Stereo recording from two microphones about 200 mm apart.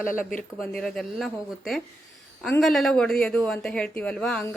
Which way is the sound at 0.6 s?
Centre (ahead or behind).